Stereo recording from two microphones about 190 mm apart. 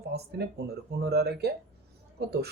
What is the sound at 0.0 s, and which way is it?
A man's voice, 60° right (ahead or behind).